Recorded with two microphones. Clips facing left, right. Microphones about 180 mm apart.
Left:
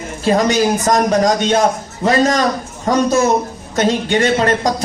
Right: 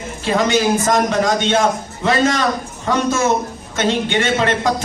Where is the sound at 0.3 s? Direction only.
40° left (ahead or behind).